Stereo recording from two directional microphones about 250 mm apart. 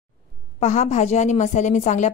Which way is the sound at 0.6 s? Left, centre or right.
Left.